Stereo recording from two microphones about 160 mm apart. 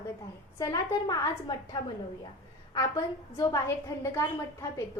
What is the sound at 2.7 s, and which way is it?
A woman's voice, 20° left (ahead or behind).